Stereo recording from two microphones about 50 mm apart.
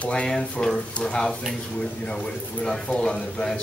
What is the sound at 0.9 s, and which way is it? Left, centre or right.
A man's voice, left.